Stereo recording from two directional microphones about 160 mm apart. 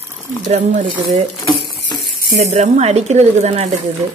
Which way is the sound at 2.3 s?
45° right (ahead or behind).